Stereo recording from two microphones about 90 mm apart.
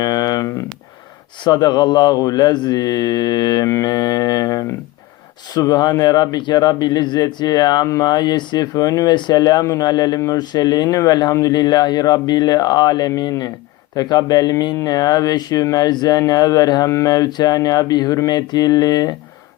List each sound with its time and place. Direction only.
0.0 s a sound: 45° left (ahead or behind)
1.5 s speech: 50° left (ahead or behind)
9.1 s speech: 55° left (ahead or behind)